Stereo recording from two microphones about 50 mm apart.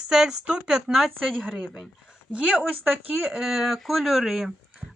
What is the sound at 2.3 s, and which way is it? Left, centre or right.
Speech, right.